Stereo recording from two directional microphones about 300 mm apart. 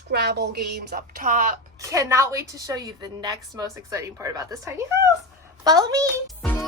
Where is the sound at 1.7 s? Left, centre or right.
Centre.